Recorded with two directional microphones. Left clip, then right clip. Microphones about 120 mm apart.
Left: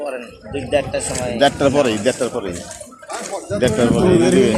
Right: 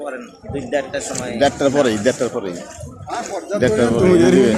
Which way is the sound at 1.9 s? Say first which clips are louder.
Right 1 dB; 45° right (ahead or behind).